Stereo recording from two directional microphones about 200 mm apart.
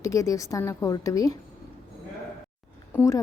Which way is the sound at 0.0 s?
15° left (ahead or behind).